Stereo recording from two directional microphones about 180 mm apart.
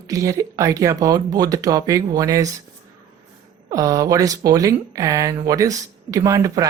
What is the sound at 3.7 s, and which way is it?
Speech, 20° right (ahead or behind).